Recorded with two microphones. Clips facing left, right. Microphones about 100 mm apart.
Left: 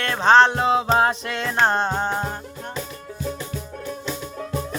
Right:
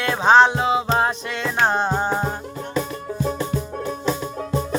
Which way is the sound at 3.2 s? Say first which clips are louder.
Right 5 dB; 35° right (ahead or behind).